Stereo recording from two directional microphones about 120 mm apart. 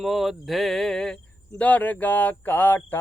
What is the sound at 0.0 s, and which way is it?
Speech, centre (ahead or behind).